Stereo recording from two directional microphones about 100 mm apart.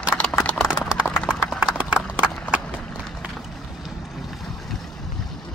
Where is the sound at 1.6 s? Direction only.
5° right (ahead or behind).